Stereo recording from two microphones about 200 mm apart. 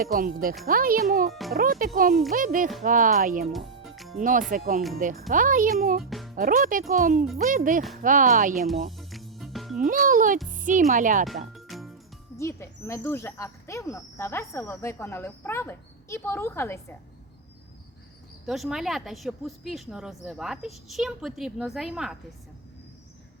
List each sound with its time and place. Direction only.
0.1 s a child's voice: 45° right (ahead or behind)
1.3 s a woman's voice: centre (ahead or behind)
1.5 s a child's voice: 45° right (ahead or behind)
3.5 s music: centre (ahead or behind)
4.2 s a child's voice: 40° right (ahead or behind)
6.0 s music: centre (ahead or behind)
6.3 s a child's voice: 45° right (ahead or behind)
8.5 s a woman's voice: centre (ahead or behind)
8.9 s music: centre (ahead or behind)
9.7 s a child's voice: 40° right (ahead or behind)
11.5 s music: centre (ahead or behind)
12.4 s speech: 15° left (ahead or behind)
18.4 s a woman's voice: centre (ahead or behind)